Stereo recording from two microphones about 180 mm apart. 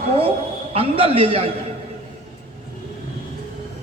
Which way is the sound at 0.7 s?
30° right (ahead or behind).